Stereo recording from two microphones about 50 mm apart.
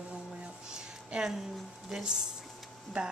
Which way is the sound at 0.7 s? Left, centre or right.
Centre.